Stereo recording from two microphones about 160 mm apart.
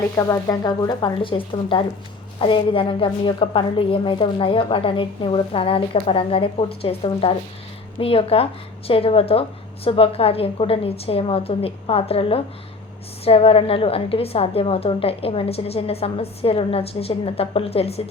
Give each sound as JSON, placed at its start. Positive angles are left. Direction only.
{"t": 0.2, "sound": "a woman's voice", "side_deg": 20}